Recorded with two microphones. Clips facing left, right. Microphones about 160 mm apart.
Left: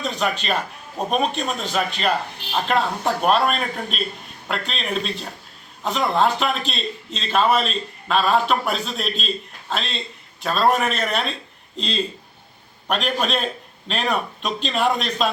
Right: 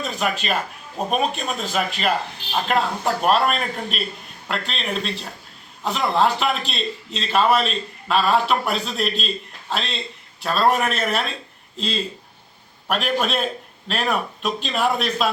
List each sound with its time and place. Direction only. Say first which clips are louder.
0.0 s a man's voice: left 1 dB; 5° right (ahead or behind)
12.9 s a man's voice: even; 5° right (ahead or behind)